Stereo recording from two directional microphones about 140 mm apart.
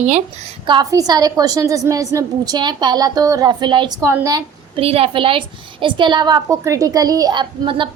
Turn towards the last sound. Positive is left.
turn(degrees=-35)  # may be behind; listen again after turning